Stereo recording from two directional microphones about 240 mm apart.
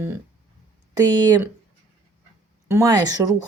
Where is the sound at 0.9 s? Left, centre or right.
Centre.